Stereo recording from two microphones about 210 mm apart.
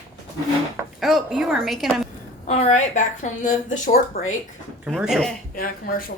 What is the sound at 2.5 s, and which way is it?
A woman's voice, 30° left (ahead or behind).